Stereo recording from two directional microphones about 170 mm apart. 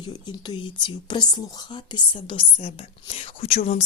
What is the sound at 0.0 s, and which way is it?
A woman's voice, 25° left (ahead or behind).